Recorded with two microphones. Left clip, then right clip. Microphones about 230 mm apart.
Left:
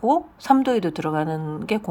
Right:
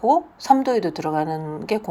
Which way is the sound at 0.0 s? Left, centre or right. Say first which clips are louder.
Right 2 dB; left.